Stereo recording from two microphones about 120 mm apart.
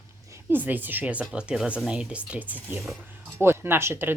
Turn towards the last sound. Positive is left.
turn(degrees=-20)  # may be behind; listen again after turning